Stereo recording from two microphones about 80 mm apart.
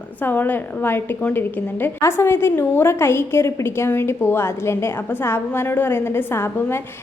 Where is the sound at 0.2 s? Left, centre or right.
Left.